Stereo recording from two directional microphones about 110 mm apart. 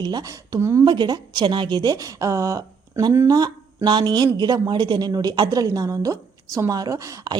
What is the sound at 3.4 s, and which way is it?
A woman's voice, 40° right (ahead or behind).